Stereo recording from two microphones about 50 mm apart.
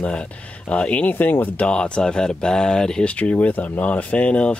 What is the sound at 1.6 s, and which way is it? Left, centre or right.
Speech, left.